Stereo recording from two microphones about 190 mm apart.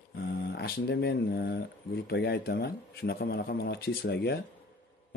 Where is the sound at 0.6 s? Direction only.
60° left (ahead or behind).